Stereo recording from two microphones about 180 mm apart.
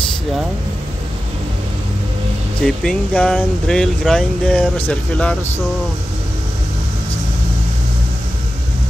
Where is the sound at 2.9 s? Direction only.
5° left (ahead or behind).